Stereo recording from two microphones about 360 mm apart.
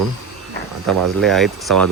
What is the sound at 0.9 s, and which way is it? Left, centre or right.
Speech, right.